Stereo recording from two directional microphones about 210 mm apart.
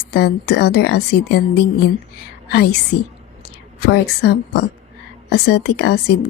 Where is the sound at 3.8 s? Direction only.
50° left (ahead or behind).